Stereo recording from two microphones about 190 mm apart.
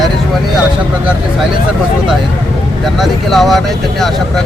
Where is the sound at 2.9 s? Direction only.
Centre (ahead or behind).